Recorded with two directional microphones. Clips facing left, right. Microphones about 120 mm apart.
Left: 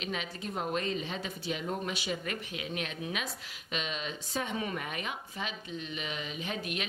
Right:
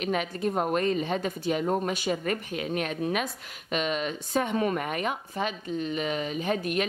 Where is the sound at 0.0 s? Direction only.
50° right (ahead or behind).